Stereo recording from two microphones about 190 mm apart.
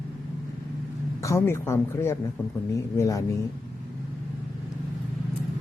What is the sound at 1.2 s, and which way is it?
A man's voice, 15° left (ahead or behind).